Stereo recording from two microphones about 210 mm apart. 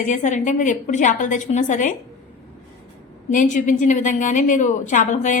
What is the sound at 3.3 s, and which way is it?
A woman's voice, 35° left (ahead or behind).